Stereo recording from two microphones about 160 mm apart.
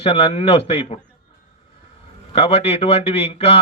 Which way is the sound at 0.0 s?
35° left (ahead or behind).